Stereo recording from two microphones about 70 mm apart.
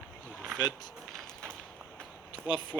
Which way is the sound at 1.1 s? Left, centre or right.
Centre.